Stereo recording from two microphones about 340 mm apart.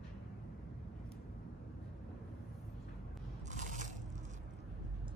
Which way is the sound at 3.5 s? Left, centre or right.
Right.